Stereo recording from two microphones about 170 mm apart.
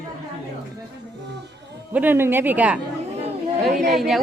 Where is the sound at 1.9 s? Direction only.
10° right (ahead or behind).